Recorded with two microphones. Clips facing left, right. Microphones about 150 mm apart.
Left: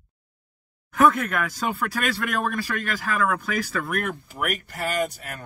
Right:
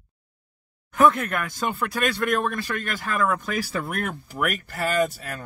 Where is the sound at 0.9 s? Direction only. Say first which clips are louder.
Even; centre (ahead or behind).